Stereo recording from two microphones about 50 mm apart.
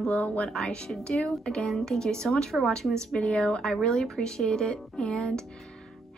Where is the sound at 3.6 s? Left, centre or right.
Centre.